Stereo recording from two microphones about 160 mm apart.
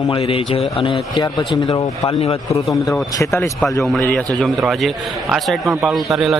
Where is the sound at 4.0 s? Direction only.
10° left (ahead or behind).